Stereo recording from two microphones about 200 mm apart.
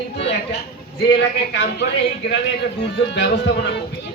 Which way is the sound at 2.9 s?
55° left (ahead or behind).